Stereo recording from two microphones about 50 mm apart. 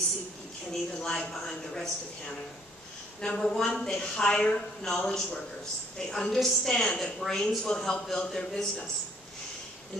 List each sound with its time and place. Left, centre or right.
0.9 s a woman's voice: centre
8.3 s a man's voice: centre